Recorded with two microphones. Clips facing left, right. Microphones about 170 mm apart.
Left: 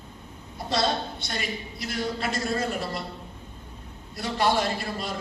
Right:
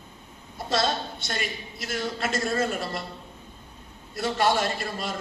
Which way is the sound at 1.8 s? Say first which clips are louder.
Even; 50° right (ahead or behind).